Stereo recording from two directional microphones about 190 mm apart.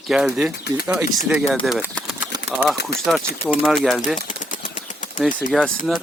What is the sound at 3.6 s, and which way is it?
Speech, centre (ahead or behind).